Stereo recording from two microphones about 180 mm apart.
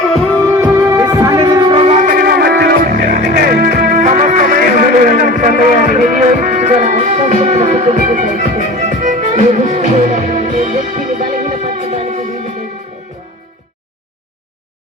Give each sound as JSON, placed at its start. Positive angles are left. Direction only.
{"t": 0.8, "sound": "music", "side_deg": -20}